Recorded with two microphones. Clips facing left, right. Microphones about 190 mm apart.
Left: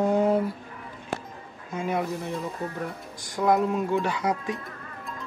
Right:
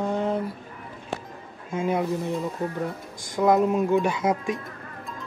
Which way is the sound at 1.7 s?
20° right (ahead or behind).